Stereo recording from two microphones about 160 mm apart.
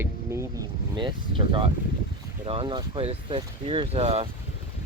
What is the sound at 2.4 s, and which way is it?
Speech, 35° right (ahead or behind).